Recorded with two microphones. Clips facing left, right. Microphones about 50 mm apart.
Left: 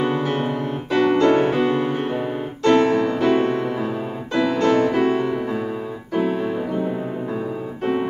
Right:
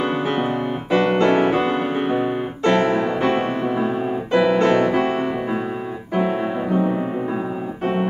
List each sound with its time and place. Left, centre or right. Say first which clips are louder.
0.0 s piano: even; centre
0.9 s music: even; centre
2.7 s music: left 2 dB; right